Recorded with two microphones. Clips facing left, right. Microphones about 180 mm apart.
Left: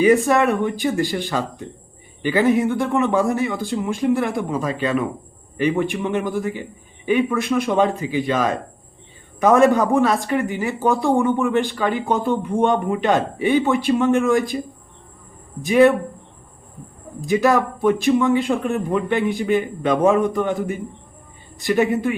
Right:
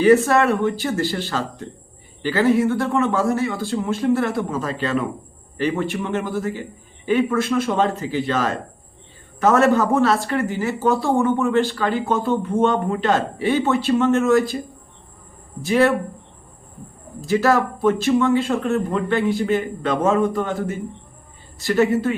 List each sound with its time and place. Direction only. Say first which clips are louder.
0.0 s speech: right 1 dB; 15° left (ahead or behind)
15.6 s speech: left 4 dB; 15° left (ahead or behind)
17.2 s speech: left 1 dB; 15° left (ahead or behind)